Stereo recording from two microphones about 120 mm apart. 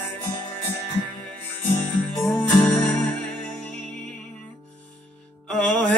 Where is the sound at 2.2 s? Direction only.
15° left (ahead or behind).